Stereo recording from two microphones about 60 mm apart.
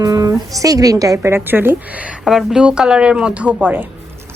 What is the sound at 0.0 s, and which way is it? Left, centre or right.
Speech, right.